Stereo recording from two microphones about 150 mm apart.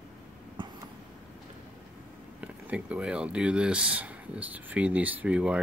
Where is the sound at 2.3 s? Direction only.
10° right (ahead or behind).